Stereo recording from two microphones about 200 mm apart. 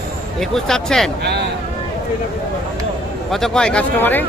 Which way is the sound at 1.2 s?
55° right (ahead or behind).